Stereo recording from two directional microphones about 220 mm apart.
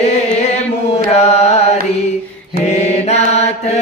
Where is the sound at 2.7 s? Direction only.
30° left (ahead or behind).